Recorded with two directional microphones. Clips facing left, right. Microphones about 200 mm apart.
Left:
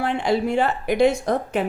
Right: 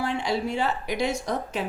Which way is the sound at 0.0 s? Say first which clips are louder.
Left 5 dB; 55° left (ahead or behind).